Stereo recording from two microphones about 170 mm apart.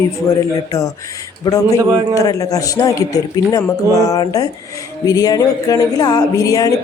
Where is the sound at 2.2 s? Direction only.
20° left (ahead or behind).